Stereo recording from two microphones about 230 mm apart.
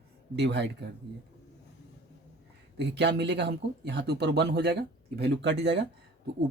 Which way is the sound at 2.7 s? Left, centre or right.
Right.